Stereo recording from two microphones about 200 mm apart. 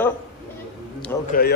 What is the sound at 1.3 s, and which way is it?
Speech, 50° left (ahead or behind).